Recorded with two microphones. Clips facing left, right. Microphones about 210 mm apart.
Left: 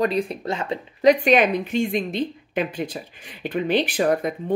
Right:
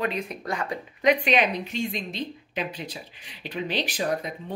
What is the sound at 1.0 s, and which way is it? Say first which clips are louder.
A woman's voice: left 6 dB; 45° left (ahead or behind).